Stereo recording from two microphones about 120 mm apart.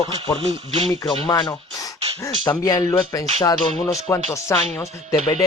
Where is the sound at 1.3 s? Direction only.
30° left (ahead or behind).